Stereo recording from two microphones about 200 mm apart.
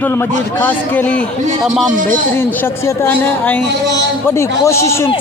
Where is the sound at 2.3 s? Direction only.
10° left (ahead or behind).